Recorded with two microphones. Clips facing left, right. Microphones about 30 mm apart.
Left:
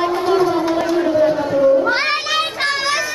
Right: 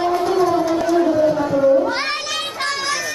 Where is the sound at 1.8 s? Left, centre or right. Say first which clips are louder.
Left 3 dB; left.